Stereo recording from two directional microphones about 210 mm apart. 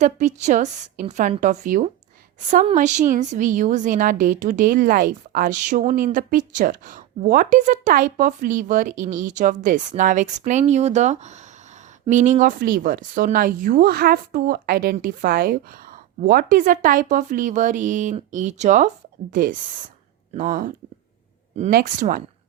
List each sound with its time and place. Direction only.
0.0 s a woman's voice: 35° right (ahead or behind)